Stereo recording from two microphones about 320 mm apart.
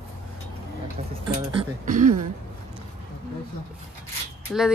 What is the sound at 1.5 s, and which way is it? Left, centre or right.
Speech, right.